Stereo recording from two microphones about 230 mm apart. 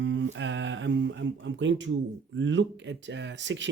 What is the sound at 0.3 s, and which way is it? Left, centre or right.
Speech, right.